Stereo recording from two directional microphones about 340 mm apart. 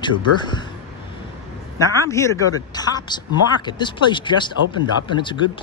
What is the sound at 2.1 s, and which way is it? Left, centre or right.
Speech, centre.